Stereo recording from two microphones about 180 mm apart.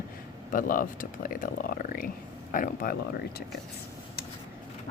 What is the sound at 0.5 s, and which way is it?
A woman's voice, 50° left (ahead or behind).